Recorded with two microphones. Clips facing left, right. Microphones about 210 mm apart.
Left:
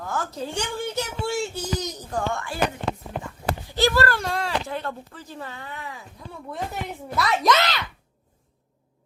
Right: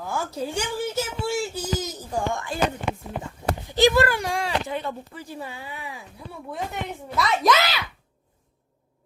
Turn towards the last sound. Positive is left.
turn(degrees=-5)  # may be behind; listen again after turning